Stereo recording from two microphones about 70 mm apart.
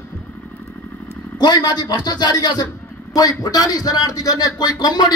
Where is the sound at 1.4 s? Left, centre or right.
Left.